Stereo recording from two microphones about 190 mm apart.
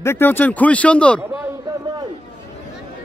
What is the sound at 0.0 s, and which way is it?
Speech, 10° left (ahead or behind).